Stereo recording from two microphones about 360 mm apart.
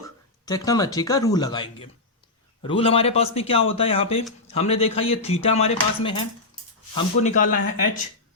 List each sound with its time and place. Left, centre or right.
0.4 s dishes: centre
6.9 s speech: centre